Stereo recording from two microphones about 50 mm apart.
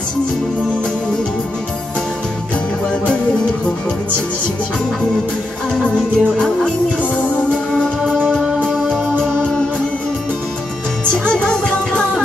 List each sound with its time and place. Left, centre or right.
6.1 s music: centre
8.6 s music: centre
9.2 s music: centre
11.2 s music: centre